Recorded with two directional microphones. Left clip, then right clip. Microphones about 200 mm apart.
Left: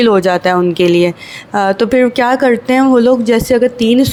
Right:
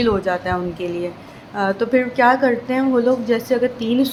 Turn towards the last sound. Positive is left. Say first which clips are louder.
# left 8 dB
turn(degrees=35)  # may be behind; listen again after turning